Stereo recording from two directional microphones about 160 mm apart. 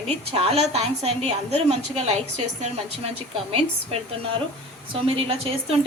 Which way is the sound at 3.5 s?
35° right (ahead or behind).